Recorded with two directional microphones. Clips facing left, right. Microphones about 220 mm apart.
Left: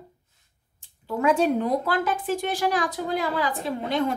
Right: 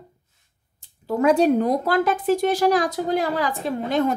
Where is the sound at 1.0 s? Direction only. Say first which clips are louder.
Right 4 dB; 40° right (ahead or behind).